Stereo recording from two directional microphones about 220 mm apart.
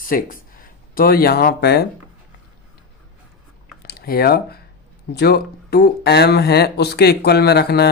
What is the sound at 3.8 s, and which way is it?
Speech, 45° left (ahead or behind).